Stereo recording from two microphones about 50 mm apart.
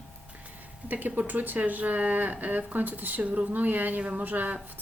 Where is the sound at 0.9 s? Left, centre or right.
Right.